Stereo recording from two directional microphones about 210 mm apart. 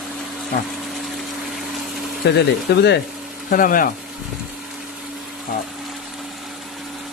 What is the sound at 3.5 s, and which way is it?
Speech, 40° left (ahead or behind).